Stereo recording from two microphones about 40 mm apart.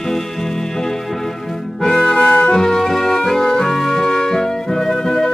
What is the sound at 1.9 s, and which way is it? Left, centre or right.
Music, left.